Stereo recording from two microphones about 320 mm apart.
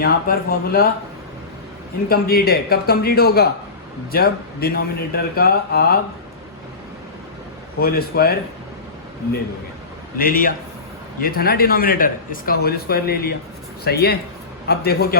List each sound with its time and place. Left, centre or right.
0.0 s speech: left
2.0 s speech: left
7.8 s speech: left
10.2 s speech: left